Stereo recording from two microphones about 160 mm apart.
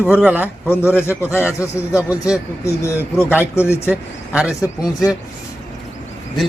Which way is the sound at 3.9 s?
10° right (ahead or behind).